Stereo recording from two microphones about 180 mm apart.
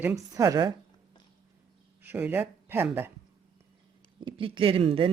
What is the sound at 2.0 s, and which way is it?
Speech, 10° right (ahead or behind).